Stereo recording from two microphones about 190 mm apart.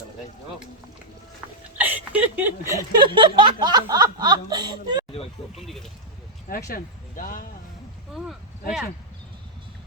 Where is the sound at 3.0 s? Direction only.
25° right (ahead or behind).